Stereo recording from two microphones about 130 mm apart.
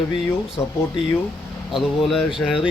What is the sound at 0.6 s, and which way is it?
Speech, 20° left (ahead or behind).